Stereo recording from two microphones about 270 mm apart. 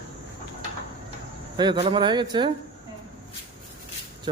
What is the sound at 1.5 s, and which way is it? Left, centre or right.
Speech, centre.